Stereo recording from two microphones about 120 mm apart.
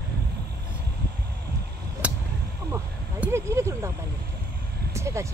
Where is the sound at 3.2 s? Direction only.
20° right (ahead or behind).